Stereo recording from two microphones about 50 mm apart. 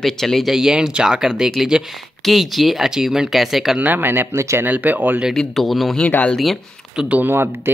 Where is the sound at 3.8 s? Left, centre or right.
Right.